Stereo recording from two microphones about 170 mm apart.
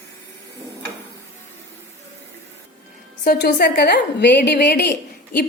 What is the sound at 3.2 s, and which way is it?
A woman's voice, 70° left (ahead or behind).